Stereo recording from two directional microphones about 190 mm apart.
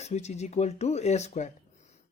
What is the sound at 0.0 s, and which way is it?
Speech, 35° left (ahead or behind).